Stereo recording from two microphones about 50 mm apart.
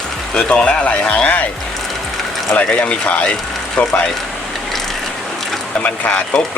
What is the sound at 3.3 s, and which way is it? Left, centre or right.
Vehicle, centre.